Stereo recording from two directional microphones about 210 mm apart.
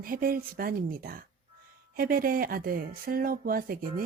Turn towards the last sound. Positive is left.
turn(degrees=-45)  # may be behind; listen again after turning